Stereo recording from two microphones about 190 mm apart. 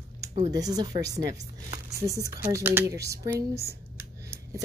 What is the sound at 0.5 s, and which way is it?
Speech, 20° right (ahead or behind).